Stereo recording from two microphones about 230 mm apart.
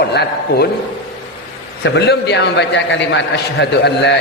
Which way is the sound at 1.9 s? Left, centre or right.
Left.